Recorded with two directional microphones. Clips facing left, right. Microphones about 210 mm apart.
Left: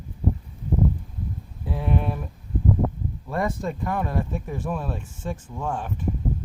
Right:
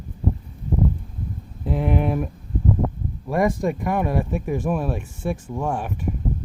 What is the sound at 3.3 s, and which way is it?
Speech, 15° right (ahead or behind).